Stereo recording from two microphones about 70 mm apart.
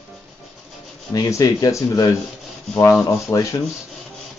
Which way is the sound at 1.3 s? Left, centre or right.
Left.